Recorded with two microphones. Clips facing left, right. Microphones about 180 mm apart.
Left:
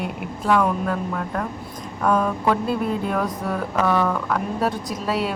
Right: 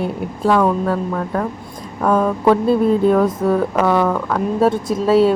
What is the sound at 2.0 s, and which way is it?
Speech, 30° right (ahead or behind).